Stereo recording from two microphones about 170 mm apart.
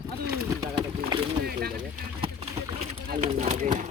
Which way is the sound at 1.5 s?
65° right (ahead or behind).